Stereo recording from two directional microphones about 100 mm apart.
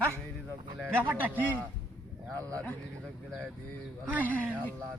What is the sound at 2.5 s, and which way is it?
Speech, 15° left (ahead or behind).